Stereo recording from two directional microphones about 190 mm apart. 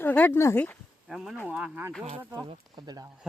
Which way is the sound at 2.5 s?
20° right (ahead or behind).